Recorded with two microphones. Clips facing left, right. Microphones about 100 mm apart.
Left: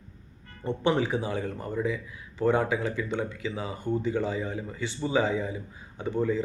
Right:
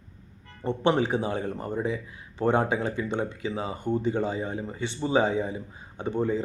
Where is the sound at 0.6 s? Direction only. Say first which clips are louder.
Right 2 dB; 20° right (ahead or behind).